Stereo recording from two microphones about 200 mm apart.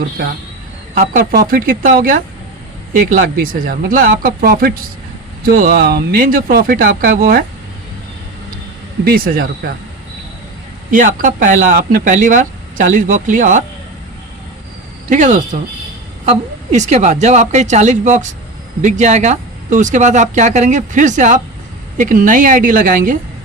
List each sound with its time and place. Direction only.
0.9 s speech: 45° right (ahead or behind)
9.0 s speech: 50° right (ahead or behind)
10.9 s speech: 40° right (ahead or behind)
15.1 s speech: 40° right (ahead or behind)
16.7 s speech: 35° right (ahead or behind)